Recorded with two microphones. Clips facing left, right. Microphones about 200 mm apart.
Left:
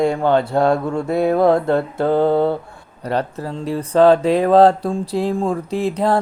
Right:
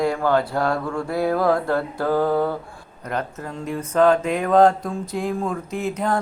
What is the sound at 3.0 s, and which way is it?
Speech, 35° left (ahead or behind).